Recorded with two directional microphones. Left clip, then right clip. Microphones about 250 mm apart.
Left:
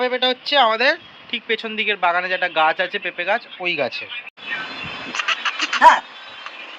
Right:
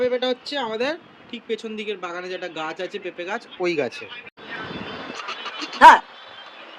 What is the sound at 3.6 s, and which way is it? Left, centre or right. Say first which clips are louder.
Speech: left 2 dB; centre.